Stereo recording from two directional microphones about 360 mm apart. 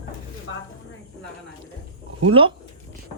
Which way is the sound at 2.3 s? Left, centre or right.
Centre.